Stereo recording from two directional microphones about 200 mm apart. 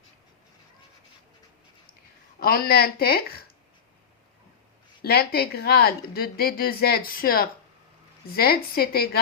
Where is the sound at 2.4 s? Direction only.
50° left (ahead or behind).